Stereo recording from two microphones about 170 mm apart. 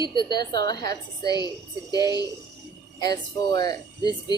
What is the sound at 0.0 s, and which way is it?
Speech, 25° left (ahead or behind).